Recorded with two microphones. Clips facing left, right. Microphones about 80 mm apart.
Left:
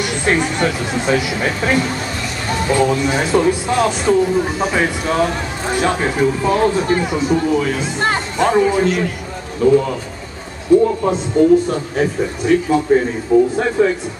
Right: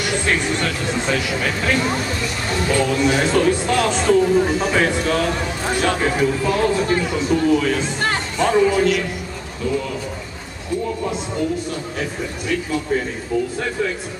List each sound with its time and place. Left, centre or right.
0.0 s a man's voice: left
6.4 s a man's voice: left
9.6 s a man's voice: left